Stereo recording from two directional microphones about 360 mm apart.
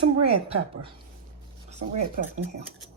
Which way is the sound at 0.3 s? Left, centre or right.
Centre.